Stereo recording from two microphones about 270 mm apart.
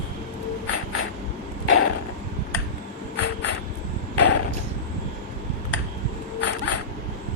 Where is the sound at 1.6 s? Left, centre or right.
Left.